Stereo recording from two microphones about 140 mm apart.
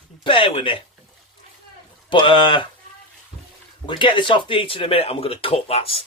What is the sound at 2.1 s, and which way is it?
Speech, 35° left (ahead or behind).